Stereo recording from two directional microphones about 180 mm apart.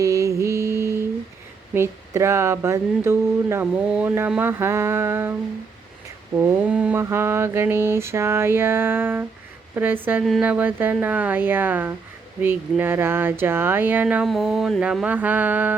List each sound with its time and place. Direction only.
0.0 s mantra: 15° right (ahead or behind)
1.7 s speech: 15° right (ahead or behind)
6.4 s speech: 5° right (ahead or behind)